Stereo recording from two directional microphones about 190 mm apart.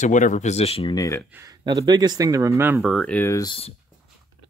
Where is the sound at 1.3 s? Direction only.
15° right (ahead or behind); by 3.5 s 15° left (ahead or behind).